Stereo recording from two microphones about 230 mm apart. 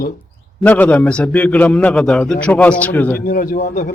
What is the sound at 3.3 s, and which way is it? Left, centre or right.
Speech, left.